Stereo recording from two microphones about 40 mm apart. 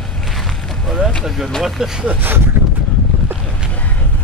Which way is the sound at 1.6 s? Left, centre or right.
Centre.